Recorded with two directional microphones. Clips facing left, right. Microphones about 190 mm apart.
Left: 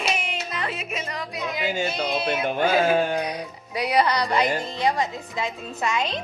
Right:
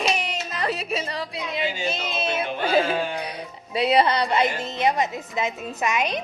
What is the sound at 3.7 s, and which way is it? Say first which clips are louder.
A woman's voice: right 2 dB; 25° right (ahead or behind).